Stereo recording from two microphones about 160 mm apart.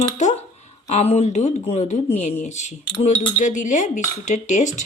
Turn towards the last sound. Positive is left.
turn(degrees=50)  # may be behind; listen again after turning